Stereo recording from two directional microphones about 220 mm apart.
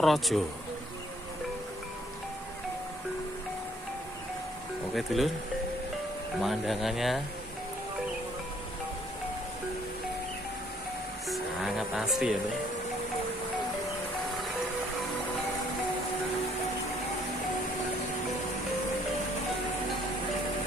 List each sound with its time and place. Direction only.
0.0 s speech: centre (ahead or behind)
4.9 s speech: centre (ahead or behind)
6.4 s speech: centre (ahead or behind)
11.2 s music: centre (ahead or behind)